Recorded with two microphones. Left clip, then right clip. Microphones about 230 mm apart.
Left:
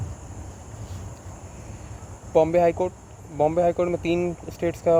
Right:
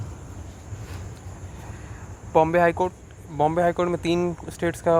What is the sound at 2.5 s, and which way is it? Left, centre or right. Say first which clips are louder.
Speech: even; centre.